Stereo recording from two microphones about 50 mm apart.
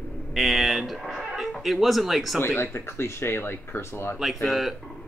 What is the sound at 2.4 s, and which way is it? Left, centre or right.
Speech, left.